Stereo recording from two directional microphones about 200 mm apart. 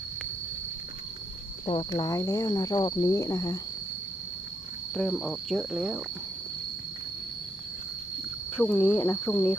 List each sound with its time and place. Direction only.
1.6 s speech: 25° left (ahead or behind)
4.9 s cricket: centre (ahead or behind)
8.5 s speech: 10° left (ahead or behind)